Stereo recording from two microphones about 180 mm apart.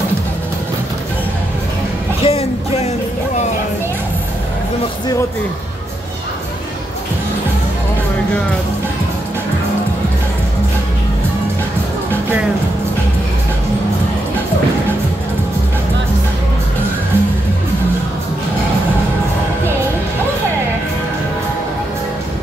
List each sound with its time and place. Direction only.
2.2 s music: 35° left (ahead or behind)